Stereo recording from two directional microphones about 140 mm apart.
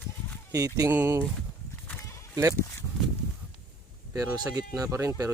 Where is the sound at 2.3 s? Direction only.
20° right (ahead or behind).